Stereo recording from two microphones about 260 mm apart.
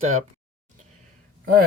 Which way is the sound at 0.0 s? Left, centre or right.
Right.